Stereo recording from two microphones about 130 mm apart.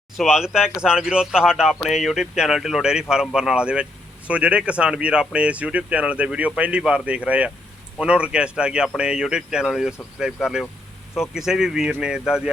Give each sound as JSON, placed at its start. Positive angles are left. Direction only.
{"t": 0.2, "sound": "speech", "side_deg": -5}